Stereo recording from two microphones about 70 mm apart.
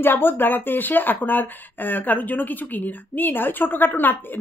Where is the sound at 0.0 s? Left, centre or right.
Left.